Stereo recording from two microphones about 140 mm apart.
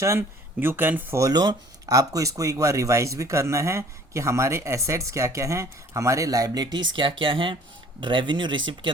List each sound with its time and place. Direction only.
0.0 s speech: 20° right (ahead or behind); by 8.9 s 35° right (ahead or behind)